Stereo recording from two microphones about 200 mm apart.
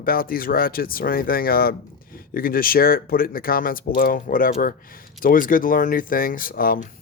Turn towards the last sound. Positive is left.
turn(degrees=45)  # may be behind; listen again after turning